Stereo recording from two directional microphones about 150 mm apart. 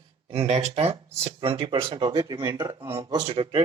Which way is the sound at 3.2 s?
35° right (ahead or behind).